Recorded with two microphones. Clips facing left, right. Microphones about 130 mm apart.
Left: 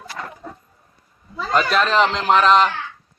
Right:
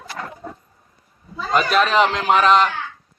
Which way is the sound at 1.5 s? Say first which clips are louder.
Right 1 dB; 5° right (ahead or behind).